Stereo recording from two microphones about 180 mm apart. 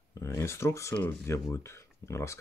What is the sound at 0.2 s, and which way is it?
Speech, 15° left (ahead or behind).